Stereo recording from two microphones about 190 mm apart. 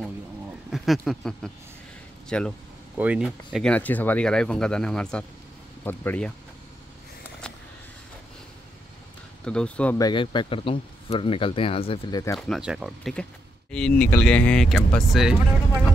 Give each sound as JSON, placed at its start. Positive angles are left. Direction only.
{"t": 0.0, "sound": "a sound", "side_deg": 0}
{"t": 2.2, "sound": "speech", "side_deg": 5}
{"t": 9.4, "sound": "speech", "side_deg": 5}
{"t": 9.9, "sound": "speech", "side_deg": 20}
{"t": 12.4, "sound": "speech", "side_deg": 0}